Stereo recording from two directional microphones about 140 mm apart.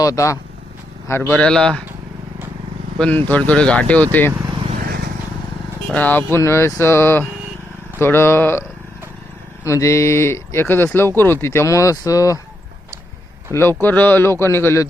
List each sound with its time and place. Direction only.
0.0 s speech: 25° left (ahead or behind); by 1.8 s 5° left (ahead or behind)
3.0 s speech: 10° left (ahead or behind)
5.9 s speech: 10° left (ahead or behind)
9.6 s speech: 20° left (ahead or behind)
13.5 s speech: 15° left (ahead or behind)